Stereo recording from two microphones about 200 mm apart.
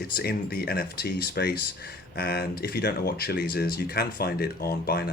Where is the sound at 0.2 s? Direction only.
50° left (ahead or behind).